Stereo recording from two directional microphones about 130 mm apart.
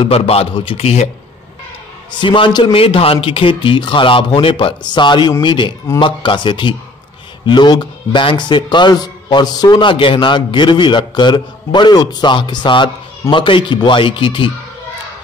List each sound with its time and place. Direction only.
0.0 s a man's voice: 50° left (ahead or behind)
2.1 s a man's voice: 40° left (ahead or behind)